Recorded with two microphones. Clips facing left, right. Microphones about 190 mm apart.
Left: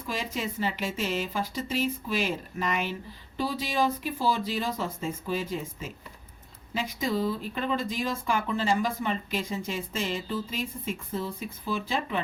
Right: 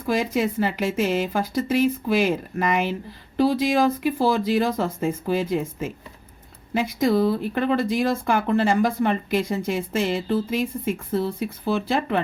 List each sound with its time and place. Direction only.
0.0 s speech: 80° right